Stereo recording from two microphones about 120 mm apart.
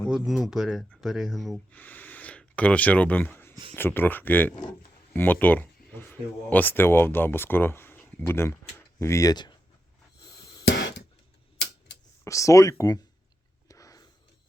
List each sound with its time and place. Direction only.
0.1 s speech: centre (ahead or behind)
1.7 s speech: 15° left (ahead or behind)
12.2 s speech: 25° left (ahead or behind)
13.7 s a sound: 30° left (ahead or behind)